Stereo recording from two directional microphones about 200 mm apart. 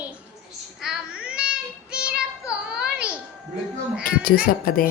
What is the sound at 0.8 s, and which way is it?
Child singing, 5° right (ahead or behind).